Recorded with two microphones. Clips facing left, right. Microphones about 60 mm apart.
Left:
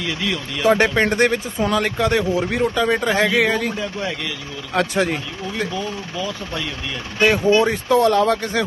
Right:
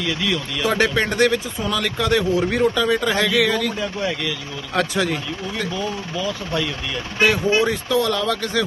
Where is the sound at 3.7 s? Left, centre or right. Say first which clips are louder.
Right 1 dB; centre.